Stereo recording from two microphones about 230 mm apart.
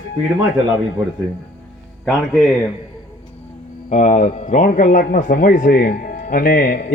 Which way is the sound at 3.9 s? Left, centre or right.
Left.